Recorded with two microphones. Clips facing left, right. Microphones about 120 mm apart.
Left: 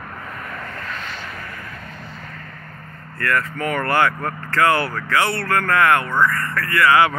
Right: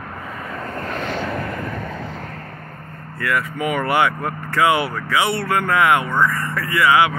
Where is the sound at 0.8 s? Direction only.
60° right (ahead or behind).